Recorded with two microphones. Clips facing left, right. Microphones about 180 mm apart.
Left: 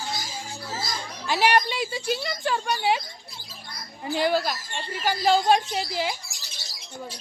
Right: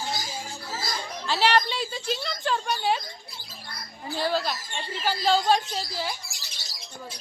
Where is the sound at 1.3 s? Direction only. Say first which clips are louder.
Left 1 dB; 15° left (ahead or behind).